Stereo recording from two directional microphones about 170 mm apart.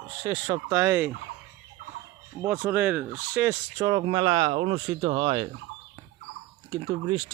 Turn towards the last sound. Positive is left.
turn(degrees=-30)  # may be behind; listen again after turning